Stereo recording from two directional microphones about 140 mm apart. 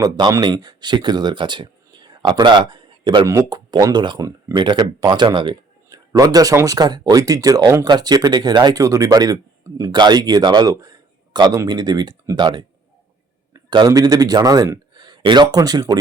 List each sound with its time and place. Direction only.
0.0 s speech: 30° right (ahead or behind)